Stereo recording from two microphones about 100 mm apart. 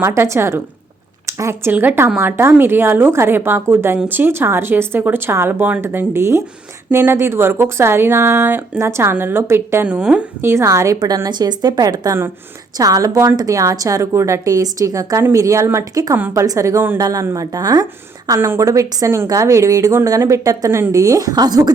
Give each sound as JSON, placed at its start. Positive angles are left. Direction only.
{"t": 0.0, "sound": "speech", "side_deg": -25}
{"t": 1.7, "sound": "a woman's voice", "side_deg": -20}
{"t": 9.8, "sound": "a woman's voice", "side_deg": -10}
{"t": 10.4, "sound": "speech", "side_deg": -25}
{"t": 11.0, "sound": "a woman's voice", "side_deg": -40}
{"t": 18.3, "sound": "a woman's voice", "side_deg": -25}